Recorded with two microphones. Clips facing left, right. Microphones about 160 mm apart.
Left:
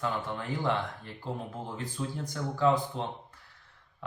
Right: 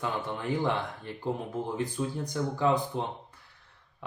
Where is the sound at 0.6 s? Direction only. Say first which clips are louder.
Right 1 dB; 15° right (ahead or behind).